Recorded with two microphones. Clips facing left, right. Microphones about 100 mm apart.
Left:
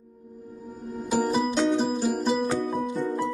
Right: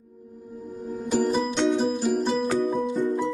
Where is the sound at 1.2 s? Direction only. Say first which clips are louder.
Even; centre (ahead or behind).